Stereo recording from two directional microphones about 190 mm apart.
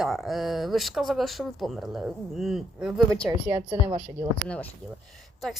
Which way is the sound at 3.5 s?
15° right (ahead or behind).